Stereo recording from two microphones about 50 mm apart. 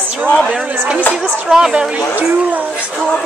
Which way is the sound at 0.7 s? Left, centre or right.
Right.